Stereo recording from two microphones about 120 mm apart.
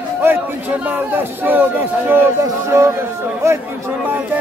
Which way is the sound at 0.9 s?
15° right (ahead or behind).